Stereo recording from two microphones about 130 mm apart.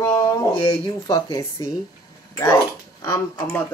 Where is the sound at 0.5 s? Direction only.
35° left (ahead or behind).